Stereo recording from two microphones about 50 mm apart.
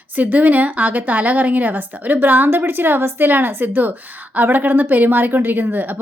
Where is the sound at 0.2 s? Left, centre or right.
Right.